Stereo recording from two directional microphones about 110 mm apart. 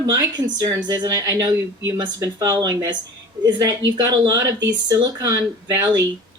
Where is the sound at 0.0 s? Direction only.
35° right (ahead or behind).